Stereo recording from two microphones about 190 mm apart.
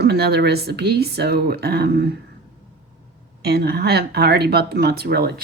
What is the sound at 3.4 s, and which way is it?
Speech, 55° right (ahead or behind).